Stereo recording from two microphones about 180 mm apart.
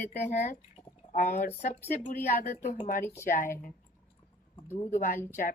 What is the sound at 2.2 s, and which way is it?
Speech, 55° left (ahead or behind).